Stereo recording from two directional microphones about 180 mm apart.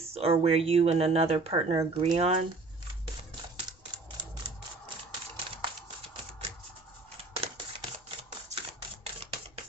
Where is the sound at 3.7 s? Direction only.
25° right (ahead or behind).